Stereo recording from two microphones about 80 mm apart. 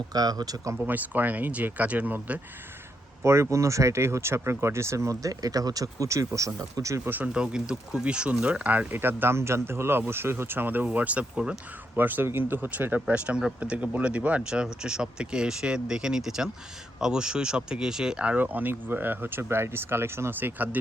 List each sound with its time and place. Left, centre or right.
0.1 s speech: right
0.8 s speech: right
3.2 s speech: right
7.3 s speech: centre; by 20.7 s right